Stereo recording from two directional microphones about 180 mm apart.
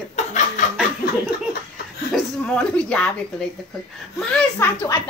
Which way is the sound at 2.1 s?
5° left (ahead or behind).